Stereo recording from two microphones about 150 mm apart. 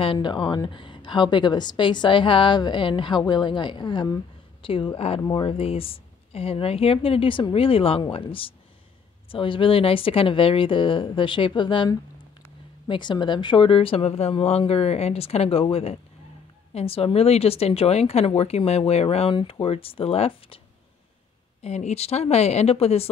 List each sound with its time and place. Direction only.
0.0 s a woman's voice: 35° left (ahead or behind)
21.6 s speech: 45° left (ahead or behind)